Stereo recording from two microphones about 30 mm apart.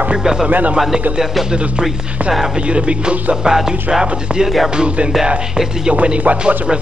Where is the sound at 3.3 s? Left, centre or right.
Right.